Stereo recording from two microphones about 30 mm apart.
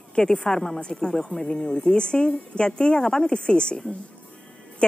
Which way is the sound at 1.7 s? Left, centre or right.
Left.